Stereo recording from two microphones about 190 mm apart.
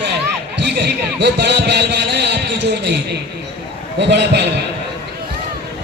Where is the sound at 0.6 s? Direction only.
60° right (ahead or behind).